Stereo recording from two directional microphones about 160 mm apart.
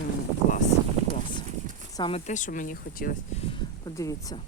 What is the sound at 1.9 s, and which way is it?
Speech, 30° left (ahead or behind).